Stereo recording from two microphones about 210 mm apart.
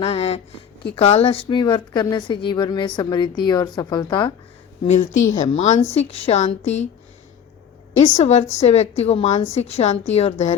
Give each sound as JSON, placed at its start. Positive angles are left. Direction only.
{"t": 0.0, "sound": "a woman's voice", "side_deg": 30}
{"t": 5.3, "sound": "a woman's voice", "side_deg": 35}
{"t": 7.9, "sound": "a woman's voice", "side_deg": 30}